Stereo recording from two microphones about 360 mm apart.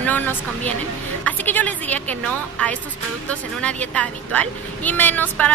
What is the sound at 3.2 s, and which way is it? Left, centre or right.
A woman's voice, centre.